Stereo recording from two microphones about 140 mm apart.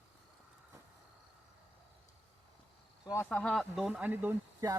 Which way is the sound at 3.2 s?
5° left (ahead or behind).